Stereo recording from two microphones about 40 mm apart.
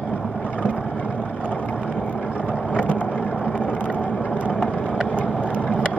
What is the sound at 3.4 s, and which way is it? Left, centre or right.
Vehicle, left.